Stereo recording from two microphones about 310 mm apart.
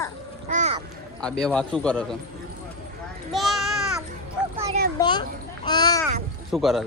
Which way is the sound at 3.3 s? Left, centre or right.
Centre.